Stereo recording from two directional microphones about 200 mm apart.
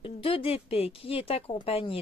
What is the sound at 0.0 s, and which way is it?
Speech, 25° left (ahead or behind).